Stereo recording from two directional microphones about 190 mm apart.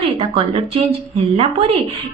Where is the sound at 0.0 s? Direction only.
25° right (ahead or behind).